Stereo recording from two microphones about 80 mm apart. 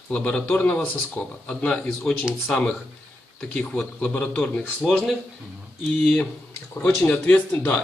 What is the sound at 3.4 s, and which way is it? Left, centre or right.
A man's voice, centre.